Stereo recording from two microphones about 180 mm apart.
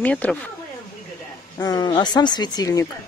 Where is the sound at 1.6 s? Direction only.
20° left (ahead or behind).